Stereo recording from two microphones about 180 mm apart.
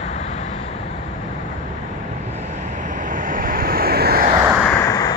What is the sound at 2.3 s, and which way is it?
Vehicle, 45° right (ahead or behind).